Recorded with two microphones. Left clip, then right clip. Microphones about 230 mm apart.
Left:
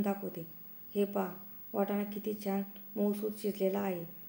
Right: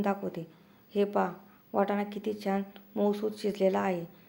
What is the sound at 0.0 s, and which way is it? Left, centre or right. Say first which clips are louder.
A woman's voice: right 5 dB; centre.